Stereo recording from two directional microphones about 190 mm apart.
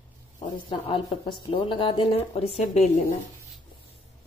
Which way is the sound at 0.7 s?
30° left (ahead or behind).